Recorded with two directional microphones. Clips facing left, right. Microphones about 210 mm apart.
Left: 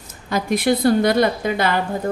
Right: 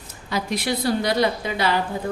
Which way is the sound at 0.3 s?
50° left (ahead or behind).